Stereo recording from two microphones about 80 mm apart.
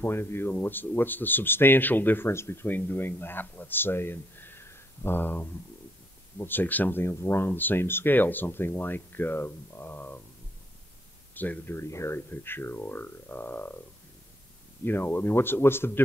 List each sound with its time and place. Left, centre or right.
0.0 s speech: left
11.3 s speech: left
11.8 s speech: left
14.9 s speech: left